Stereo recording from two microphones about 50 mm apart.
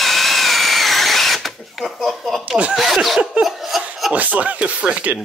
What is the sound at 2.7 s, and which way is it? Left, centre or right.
Speech, centre.